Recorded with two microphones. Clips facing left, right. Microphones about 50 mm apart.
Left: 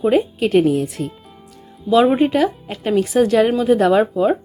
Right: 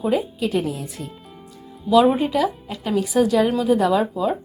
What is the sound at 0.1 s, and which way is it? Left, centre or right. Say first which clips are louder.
Speech: left 6 dB; left.